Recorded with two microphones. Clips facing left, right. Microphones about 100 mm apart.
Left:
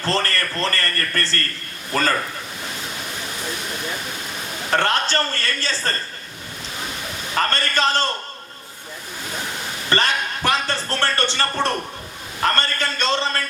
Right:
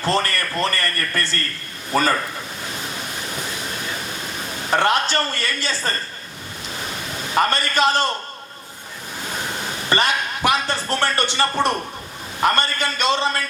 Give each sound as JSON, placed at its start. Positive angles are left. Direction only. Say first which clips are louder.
{"t": 0.0, "sound": "a man's voice", "louder": "right 1 dB", "side_deg": -15}
{"t": 4.7, "sound": "a man's voice", "louder": "right 2 dB", "side_deg": -15}
{"t": 7.3, "sound": "a man's voice", "louder": "right 3 dB", "side_deg": -15}
{"t": 9.9, "sound": "a man's voice", "louder": "right 1 dB", "side_deg": -15}